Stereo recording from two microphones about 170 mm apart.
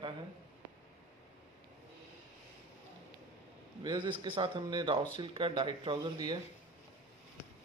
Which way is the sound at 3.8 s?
25° right (ahead or behind).